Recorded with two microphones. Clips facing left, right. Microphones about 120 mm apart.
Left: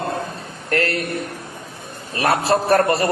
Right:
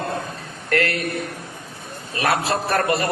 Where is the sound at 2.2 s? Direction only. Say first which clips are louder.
Left 3 dB; 35° left (ahead or behind).